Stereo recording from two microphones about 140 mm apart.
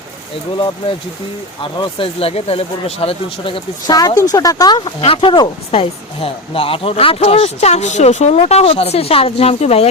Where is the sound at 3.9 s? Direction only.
25° left (ahead or behind).